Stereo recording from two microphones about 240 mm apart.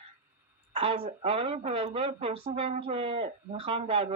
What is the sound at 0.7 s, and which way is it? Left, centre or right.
Speech, right.